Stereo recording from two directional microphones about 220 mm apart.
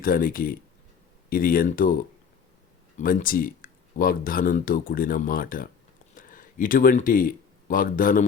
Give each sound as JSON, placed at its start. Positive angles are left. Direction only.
{"t": 0.0, "sound": "speech", "side_deg": 40}